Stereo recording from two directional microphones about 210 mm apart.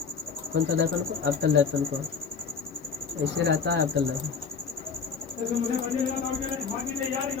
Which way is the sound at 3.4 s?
50° right (ahead or behind).